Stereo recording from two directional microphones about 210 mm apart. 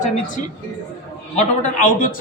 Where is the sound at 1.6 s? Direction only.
40° left (ahead or behind).